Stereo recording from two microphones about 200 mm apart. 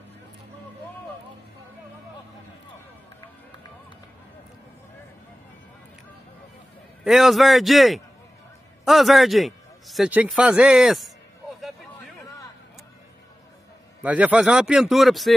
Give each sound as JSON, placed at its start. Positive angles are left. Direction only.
{"t": 7.1, "sound": "a man's voice", "side_deg": 0}
{"t": 14.0, "sound": "a man's voice", "side_deg": -5}